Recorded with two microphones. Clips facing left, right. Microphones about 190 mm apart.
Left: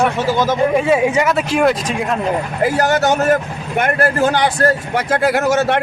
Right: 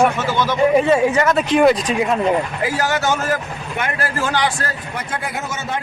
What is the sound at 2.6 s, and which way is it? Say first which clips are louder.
A man's voice: left 5 dB; 50° left (ahead or behind).